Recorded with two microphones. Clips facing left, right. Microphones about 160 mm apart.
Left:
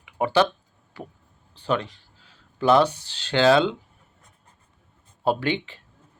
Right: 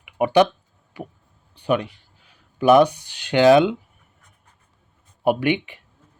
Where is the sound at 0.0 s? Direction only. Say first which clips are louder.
Right 4 dB; 15° right (ahead or behind).